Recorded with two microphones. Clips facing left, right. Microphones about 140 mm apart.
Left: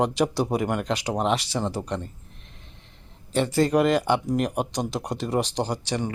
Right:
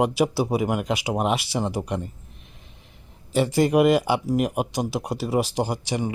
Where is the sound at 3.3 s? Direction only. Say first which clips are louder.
Right 2 dB; 10° right (ahead or behind).